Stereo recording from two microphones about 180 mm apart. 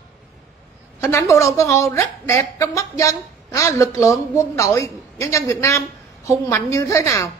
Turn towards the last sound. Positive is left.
turn(degrees=15)  # may be behind; listen again after turning